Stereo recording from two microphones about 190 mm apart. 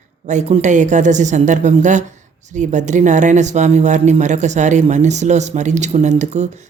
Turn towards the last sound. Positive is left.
turn(degrees=-35)  # may be behind; listen again after turning